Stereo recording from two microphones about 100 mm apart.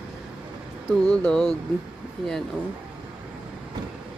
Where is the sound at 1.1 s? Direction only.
10° left (ahead or behind).